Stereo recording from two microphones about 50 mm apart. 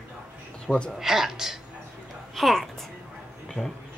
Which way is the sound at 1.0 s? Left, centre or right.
Centre.